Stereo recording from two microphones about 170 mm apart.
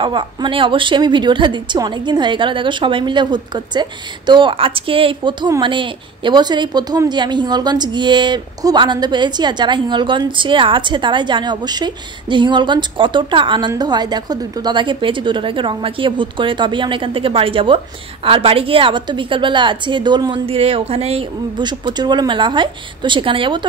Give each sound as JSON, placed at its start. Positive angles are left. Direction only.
{"t": 0.0, "sound": "speech", "side_deg": -30}